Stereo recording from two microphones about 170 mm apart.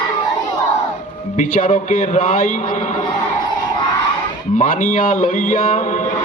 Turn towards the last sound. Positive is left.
turn(degrees=50)  # may be behind; listen again after turning